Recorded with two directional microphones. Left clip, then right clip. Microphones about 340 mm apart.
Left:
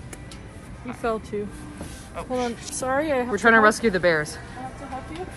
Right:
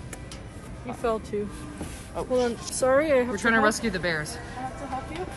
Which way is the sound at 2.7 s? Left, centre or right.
Centre.